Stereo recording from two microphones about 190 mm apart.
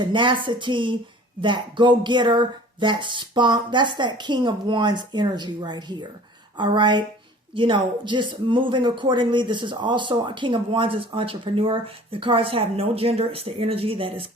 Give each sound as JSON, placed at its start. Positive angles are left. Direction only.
{"t": 0.0, "sound": "speech", "side_deg": -25}